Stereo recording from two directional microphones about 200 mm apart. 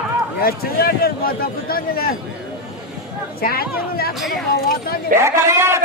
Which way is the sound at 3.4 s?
50° left (ahead or behind).